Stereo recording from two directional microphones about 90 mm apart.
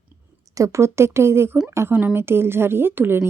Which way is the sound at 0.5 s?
35° right (ahead or behind).